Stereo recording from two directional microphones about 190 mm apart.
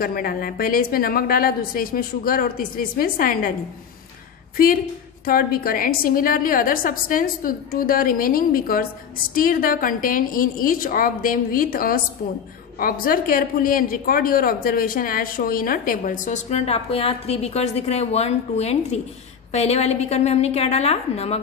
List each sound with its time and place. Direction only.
0.0 s a man's voice: 50° left (ahead or behind)
5.2 s a man's voice: 50° left (ahead or behind); by 21.4 s 30° left (ahead or behind)